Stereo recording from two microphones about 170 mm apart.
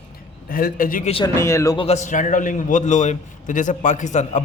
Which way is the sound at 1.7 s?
40° left (ahead or behind).